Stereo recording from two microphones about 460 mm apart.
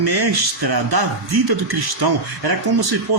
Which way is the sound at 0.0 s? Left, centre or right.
Right.